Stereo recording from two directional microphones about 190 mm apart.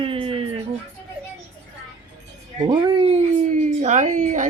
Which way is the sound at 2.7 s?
25° right (ahead or behind).